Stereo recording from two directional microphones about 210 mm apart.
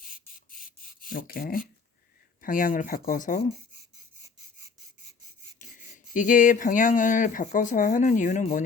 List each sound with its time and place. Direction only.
0.0 s a sound: 40° left (ahead or behind)
2.4 s speech: 40° left (ahead or behind)
6.1 s speech: 40° left (ahead or behind)